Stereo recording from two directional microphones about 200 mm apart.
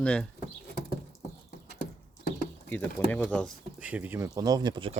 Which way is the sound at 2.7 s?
10° left (ahead or behind).